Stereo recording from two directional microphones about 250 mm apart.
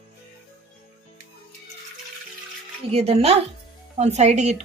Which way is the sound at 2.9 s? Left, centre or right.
Right.